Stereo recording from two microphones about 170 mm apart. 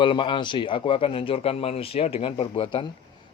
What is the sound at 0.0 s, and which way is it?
Speech, 30° left (ahead or behind).